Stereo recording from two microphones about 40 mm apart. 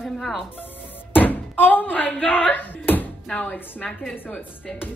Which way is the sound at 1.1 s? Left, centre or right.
Left.